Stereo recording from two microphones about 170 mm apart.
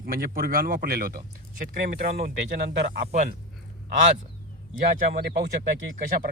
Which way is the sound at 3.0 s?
45° right (ahead or behind).